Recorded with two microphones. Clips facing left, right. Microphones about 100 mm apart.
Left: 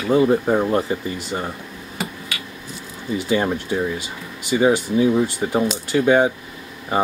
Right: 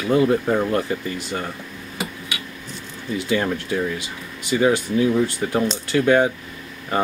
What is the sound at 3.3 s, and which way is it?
Speech, 20° left (ahead or behind).